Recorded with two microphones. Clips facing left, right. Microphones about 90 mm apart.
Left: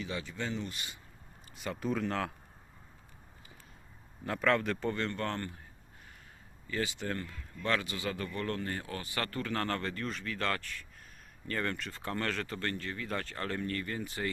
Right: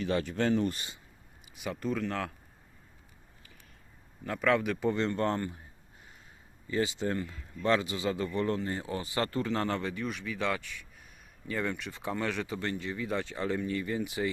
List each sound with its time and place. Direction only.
0.0 s speech: 55° right (ahead or behind)
0.7 s speech: 30° right (ahead or behind)
1.5 s speech: centre (ahead or behind)
4.3 s speech: centre (ahead or behind); by 5.4 s 25° right (ahead or behind)
6.7 s a man's voice: 20° right (ahead or behind)